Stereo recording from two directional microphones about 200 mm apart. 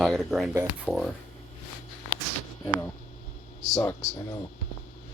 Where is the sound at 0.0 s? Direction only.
Centre (ahead or behind).